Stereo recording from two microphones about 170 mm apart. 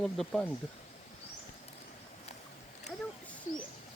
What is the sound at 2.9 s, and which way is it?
Bird, 5° left (ahead or behind).